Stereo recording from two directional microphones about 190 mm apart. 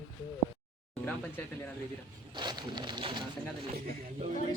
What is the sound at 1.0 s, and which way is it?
Speech, 5° left (ahead or behind).